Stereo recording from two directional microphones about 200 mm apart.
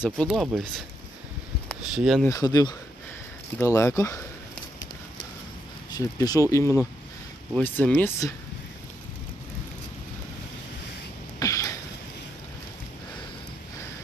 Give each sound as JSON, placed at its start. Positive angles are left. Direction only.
{"t": 0.0, "sound": "speech", "side_deg": 0}
{"t": 2.0, "sound": "speech", "side_deg": 0}
{"t": 2.2, "sound": "speech", "side_deg": 20}
{"t": 5.9, "sound": "speech", "side_deg": 20}
{"t": 11.3, "sound": "a sound", "side_deg": 15}